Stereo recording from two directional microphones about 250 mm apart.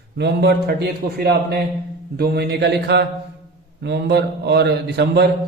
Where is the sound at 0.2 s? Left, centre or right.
Right.